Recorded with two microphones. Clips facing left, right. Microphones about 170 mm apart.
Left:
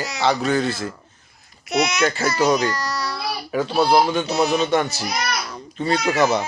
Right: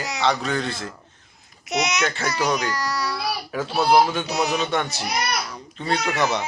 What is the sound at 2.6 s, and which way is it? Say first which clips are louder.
Baby cry: left 2 dB; 10° right (ahead or behind).